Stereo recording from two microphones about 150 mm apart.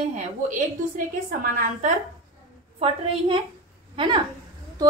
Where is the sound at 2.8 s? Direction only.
40° right (ahead or behind).